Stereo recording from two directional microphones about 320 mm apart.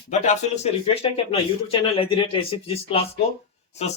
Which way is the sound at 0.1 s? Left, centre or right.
Left.